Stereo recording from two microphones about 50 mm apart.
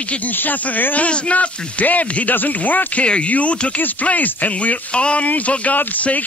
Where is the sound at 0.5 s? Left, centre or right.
Left.